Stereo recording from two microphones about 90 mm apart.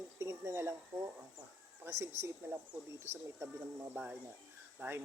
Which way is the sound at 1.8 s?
30° right (ahead or behind).